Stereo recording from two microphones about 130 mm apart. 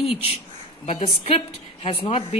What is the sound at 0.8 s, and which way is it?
A woman's voice, 55° left (ahead or behind).